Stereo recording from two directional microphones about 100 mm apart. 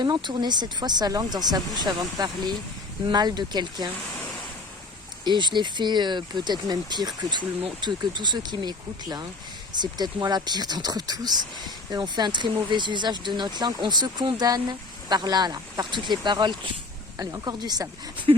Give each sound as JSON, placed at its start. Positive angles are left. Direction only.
{"t": 0.0, "sound": "speech", "side_deg": -50}
{"t": 5.2, "sound": "speech", "side_deg": -50}
{"t": 17.2, "sound": "a woman's voice", "side_deg": -40}
{"t": 18.3, "sound": "speech", "side_deg": -60}